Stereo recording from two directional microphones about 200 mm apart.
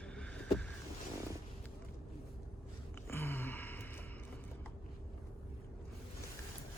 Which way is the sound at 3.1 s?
10° left (ahead or behind).